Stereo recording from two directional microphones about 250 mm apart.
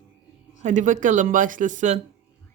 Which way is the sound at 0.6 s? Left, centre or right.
Right.